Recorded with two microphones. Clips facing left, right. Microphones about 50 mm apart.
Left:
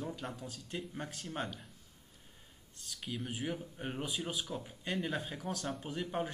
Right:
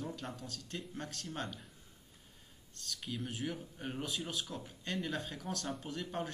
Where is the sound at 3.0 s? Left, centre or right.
Centre.